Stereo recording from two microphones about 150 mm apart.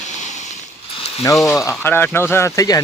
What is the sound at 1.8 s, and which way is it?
Speech, 15° left (ahead or behind).